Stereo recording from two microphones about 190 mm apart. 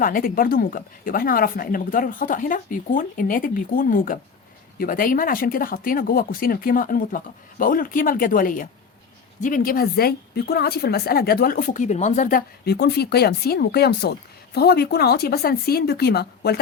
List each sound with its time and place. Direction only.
0.0 s a woman's voice: 50° left (ahead or behind)